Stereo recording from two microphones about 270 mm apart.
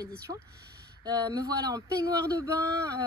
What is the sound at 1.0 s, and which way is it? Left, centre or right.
Speech, centre.